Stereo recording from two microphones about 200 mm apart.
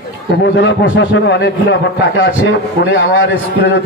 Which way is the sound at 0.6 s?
65° left (ahead or behind).